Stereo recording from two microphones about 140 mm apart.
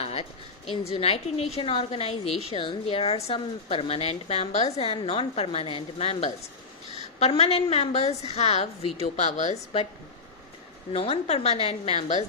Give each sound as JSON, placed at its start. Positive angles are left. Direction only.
{"t": 0.0, "sound": "a woman's voice", "side_deg": 45}
{"t": 10.9, "sound": "a woman's voice", "side_deg": 45}